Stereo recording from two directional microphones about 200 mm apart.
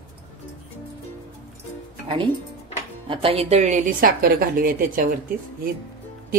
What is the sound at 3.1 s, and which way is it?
A woman's voice, 30° right (ahead or behind).